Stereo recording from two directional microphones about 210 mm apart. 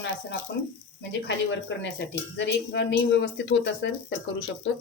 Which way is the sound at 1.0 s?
55° left (ahead or behind).